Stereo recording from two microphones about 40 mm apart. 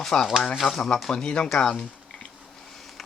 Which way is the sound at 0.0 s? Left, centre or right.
Centre.